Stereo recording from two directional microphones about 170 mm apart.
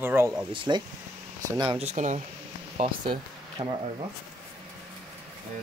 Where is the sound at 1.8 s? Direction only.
45° right (ahead or behind).